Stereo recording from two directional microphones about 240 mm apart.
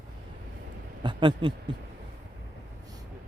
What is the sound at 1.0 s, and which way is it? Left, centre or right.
Speech, centre.